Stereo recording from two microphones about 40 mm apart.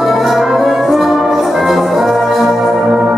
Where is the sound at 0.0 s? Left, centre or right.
Centre.